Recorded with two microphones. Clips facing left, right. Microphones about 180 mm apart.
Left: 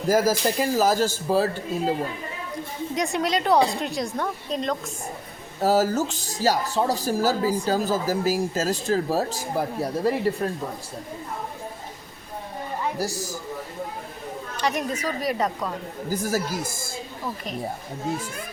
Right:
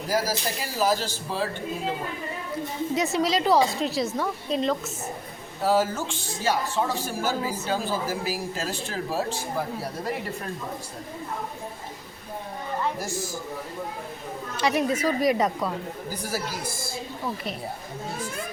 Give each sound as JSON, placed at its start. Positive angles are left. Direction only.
{"t": 0.1, "sound": "a man's voice", "side_deg": 50}
{"t": 2.9, "sound": "a woman's voice", "side_deg": -5}
{"t": 5.6, "sound": "speech", "side_deg": 40}
{"t": 13.0, "sound": "speech", "side_deg": 40}
{"t": 14.6, "sound": "a woman's voice", "side_deg": -10}
{"t": 16.0, "sound": "a man's voice", "side_deg": 45}